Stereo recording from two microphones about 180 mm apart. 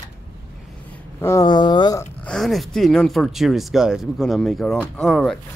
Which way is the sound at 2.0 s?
5° left (ahead or behind).